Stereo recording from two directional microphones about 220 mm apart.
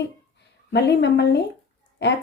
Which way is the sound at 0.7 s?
50° left (ahead or behind).